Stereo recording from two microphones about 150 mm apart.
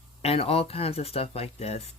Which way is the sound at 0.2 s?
40° left (ahead or behind).